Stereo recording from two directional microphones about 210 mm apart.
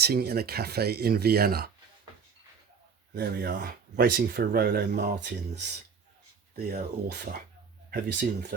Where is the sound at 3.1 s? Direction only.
50° right (ahead or behind).